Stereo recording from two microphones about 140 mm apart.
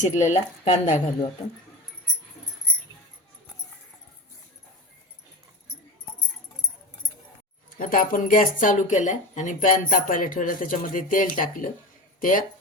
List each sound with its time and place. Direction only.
0.0 s speech: 60° left (ahead or behind)
7.8 s speech: 75° left (ahead or behind)